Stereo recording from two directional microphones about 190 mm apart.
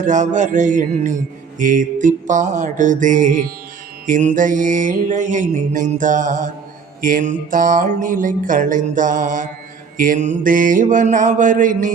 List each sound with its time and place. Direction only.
0.0 s music: 40° right (ahead or behind)
4.0 s mantra: 40° right (ahead or behind)